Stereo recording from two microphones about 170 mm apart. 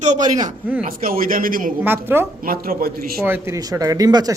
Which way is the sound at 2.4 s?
60° right (ahead or behind).